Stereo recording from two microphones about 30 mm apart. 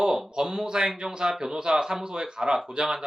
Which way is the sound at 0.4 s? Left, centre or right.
Right.